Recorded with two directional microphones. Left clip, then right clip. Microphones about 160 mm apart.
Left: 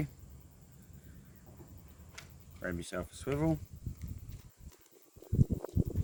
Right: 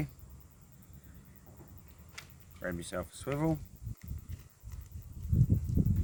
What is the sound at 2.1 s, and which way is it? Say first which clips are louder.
Speech: right 2 dB; centre (ahead or behind).